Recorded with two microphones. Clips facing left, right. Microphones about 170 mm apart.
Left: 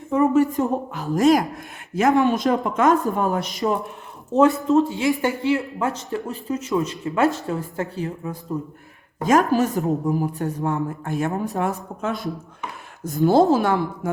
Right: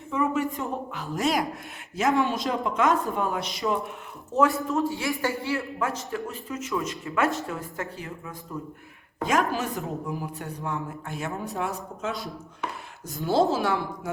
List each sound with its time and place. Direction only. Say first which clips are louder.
0.1 s a woman's voice: left 8 dB; 45° left (ahead or behind)
2.1 s speech: left 7 dB; 20° left (ahead or behind)
2.5 s a woman's voice: left 5 dB; 50° left (ahead or behind)
4.4 s speech: left 7 dB; 25° left (ahead or behind)
7.4 s a woman's voice: left 7 dB; 35° left (ahead or behind)
9.2 s a woman's voice: left 7 dB; 45° left (ahead or behind)
13.1 s a woman's voice: left 7 dB; 50° left (ahead or behind)